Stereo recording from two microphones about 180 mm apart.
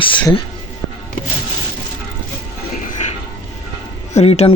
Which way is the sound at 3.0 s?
40° left (ahead or behind).